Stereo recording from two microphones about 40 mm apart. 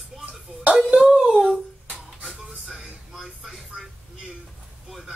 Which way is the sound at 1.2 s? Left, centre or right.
Right.